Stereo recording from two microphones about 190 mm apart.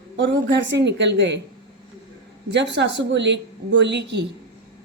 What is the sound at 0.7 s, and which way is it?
Speech, 70° right (ahead or behind).